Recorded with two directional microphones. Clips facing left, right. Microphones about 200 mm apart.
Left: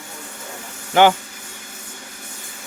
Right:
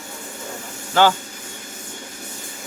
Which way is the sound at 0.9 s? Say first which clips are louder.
Left 3 dB; 15° left (ahead or behind).